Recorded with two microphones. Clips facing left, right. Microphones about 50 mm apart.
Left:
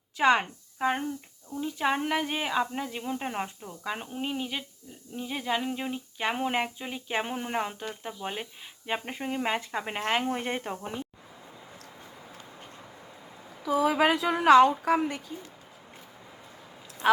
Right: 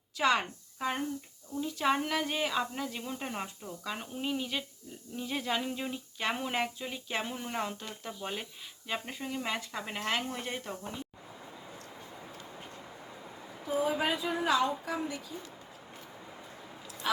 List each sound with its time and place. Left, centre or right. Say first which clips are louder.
0.2 s speech: left 5 dB; left
8.9 s speech: left 5 dB; left
13.7 s a woman's voice: left 7 dB; left